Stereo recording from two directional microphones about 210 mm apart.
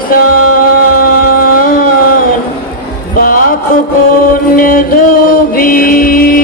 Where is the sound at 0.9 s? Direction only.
45° left (ahead or behind).